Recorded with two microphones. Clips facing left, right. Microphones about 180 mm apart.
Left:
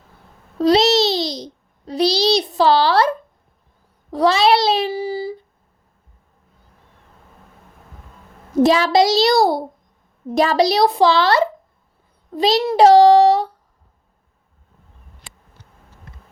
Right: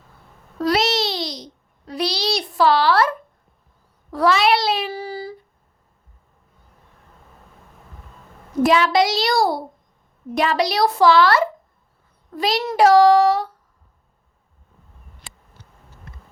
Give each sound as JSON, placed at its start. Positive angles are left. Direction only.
{"t": 0.6, "sound": "babbling", "side_deg": 25}
{"t": 1.9, "sound": "a sound", "side_deg": 25}
{"t": 4.1, "sound": "a child's voice", "side_deg": 25}
{"t": 4.9, "sound": "child singing", "side_deg": 10}
{"t": 8.6, "sound": "a child's voice", "side_deg": 35}
{"t": 10.3, "sound": "a child's voice", "side_deg": 35}